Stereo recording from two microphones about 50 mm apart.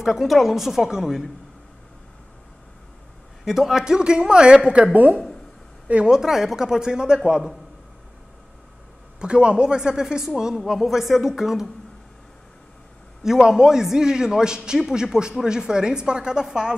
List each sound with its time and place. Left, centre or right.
0.0 s a woman's voice: centre
3.4 s speech: centre
6.0 s speech: centre
9.2 s speech: right; by 11.7 s centre
13.2 s speech: centre